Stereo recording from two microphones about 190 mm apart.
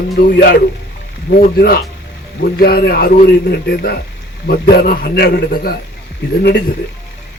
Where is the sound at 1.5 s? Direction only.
55° left (ahead or behind).